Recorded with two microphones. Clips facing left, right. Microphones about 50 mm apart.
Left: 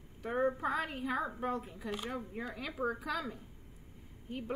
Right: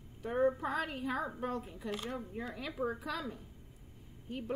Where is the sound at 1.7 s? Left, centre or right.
Centre.